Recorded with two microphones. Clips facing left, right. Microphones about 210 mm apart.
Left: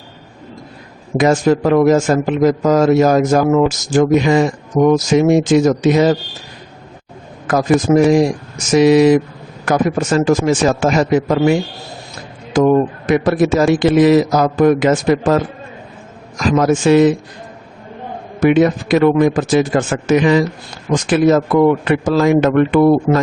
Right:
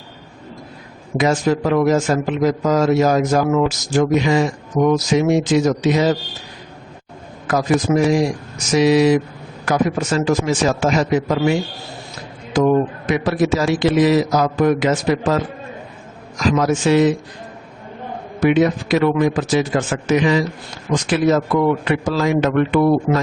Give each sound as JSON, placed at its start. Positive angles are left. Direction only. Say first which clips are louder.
{"t": 1.1, "sound": "a man's voice", "louder": "left 4 dB", "side_deg": 50}
{"t": 7.4, "sound": "a man's voice", "louder": "left 4 dB", "side_deg": 50}
{"t": 12.5, "sound": "a man's voice", "louder": "left 3 dB", "side_deg": 50}
{"t": 16.4, "sound": "a man's voice", "louder": "left 3 dB", "side_deg": 50}
{"t": 18.3, "sound": "a man's voice", "louder": "left 3 dB", "side_deg": 50}